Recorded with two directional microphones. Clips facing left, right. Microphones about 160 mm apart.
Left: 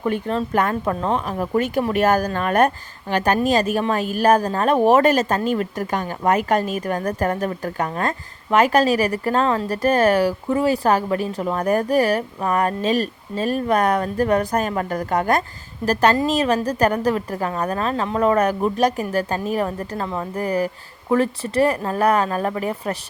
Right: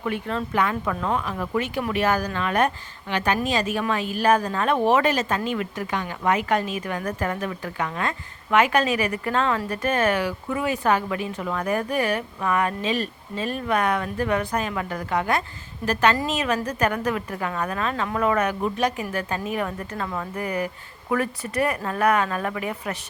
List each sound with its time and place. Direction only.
0.1 s speech: 30° left (ahead or behind)
0.5 s speech: 45° left (ahead or behind)